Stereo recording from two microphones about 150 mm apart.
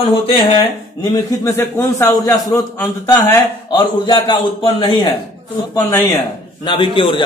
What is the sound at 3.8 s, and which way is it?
A man's voice, 30° left (ahead or behind).